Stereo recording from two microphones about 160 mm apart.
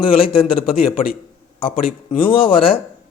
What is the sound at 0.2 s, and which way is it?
Speech, 35° left (ahead or behind).